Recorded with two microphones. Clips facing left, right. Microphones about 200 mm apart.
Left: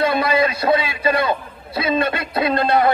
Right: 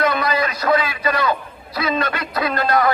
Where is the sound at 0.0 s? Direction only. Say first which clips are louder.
Left 2 dB; 30° left (ahead or behind).